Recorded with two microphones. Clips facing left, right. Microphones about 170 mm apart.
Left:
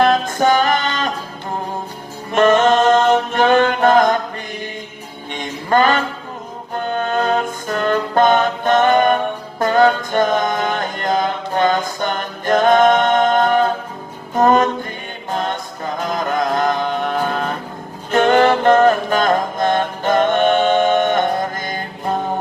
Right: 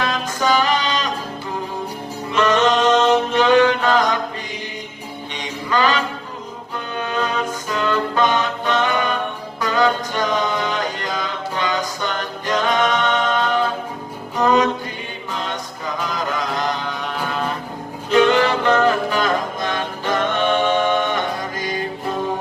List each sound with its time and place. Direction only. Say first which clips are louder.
0.0 s music: left 7 dB; 50° left (ahead or behind)
2.3 s music: left 4 dB; 50° left (ahead or behind)
3.3 s a sound: even; 50° left (ahead or behind)
5.4 s music: left 4 dB; 50° left (ahead or behind)
15.3 s a capella: left 6 dB; 50° left (ahead or behind)
16.0 s chant: left 5 dB; 50° left (ahead or behind)
18.1 s music: left 2 dB; 50° left (ahead or behind)